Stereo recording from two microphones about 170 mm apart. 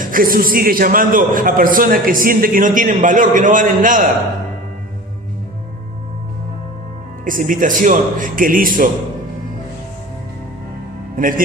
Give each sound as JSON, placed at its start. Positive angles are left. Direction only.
{"t": 0.0, "sound": "a man's voice", "side_deg": -55}
{"t": 7.3, "sound": "a man's voice", "side_deg": -55}
{"t": 11.2, "sound": "a man's voice", "side_deg": -55}